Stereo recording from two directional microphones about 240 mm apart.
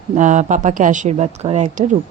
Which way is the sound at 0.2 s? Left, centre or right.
Right.